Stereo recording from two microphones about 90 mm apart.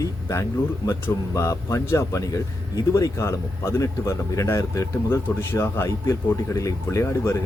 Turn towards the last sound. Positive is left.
turn(degrees=30)  # may be behind; listen again after turning